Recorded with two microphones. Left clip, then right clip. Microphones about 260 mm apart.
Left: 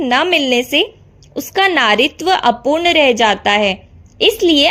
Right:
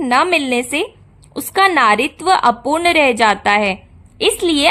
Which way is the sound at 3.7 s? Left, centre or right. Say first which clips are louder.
Left 3 dB; right.